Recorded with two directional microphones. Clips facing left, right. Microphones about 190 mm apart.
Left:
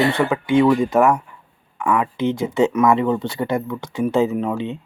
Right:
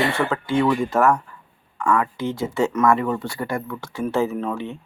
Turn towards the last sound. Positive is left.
turn(degrees=15)  # may be behind; listen again after turning